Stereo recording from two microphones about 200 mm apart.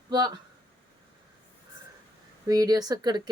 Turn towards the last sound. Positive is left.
turn(degrees=-20)  # may be behind; listen again after turning